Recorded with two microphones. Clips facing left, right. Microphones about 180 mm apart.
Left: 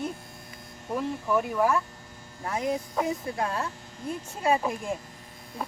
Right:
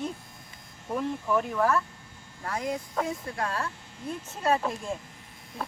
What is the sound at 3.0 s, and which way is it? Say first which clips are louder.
Speech: left 2 dB; 20° left (ahead or behind).